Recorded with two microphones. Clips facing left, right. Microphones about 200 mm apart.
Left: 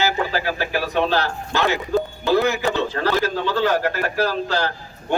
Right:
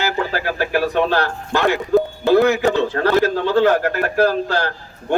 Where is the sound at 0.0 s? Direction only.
50° right (ahead or behind).